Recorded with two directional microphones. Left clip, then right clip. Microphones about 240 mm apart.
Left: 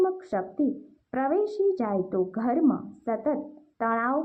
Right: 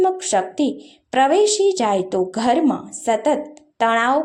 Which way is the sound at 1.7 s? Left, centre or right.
Right.